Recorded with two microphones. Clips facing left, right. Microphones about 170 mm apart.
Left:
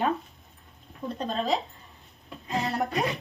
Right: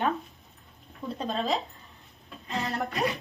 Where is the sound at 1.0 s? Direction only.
20° left (ahead or behind).